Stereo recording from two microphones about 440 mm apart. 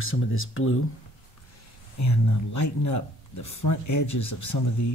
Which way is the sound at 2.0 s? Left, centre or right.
Left.